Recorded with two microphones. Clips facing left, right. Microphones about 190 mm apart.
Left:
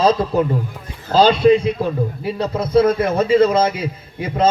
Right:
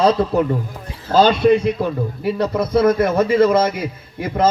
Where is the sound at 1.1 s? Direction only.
50° right (ahead or behind).